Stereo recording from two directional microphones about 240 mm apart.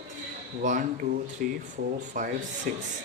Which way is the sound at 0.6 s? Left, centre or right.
Right.